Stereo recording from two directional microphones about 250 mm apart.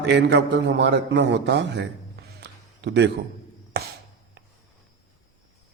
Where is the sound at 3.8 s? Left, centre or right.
Right.